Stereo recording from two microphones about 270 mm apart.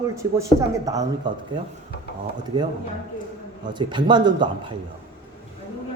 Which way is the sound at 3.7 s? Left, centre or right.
Centre.